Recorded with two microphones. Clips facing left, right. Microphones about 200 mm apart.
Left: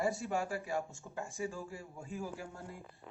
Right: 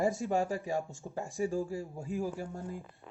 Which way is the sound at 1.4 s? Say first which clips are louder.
Right 10 dB; 35° right (ahead or behind).